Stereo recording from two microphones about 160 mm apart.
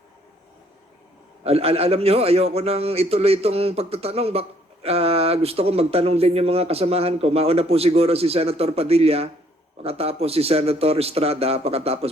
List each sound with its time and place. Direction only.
1.5 s a man's voice: 40° right (ahead or behind)